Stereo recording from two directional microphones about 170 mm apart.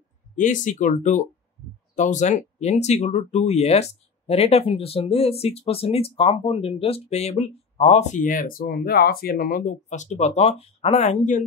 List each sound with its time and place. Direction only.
0.4 s speech: 45° left (ahead or behind)